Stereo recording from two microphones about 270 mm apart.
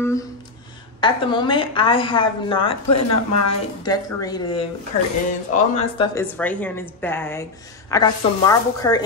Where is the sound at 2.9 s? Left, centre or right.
Left.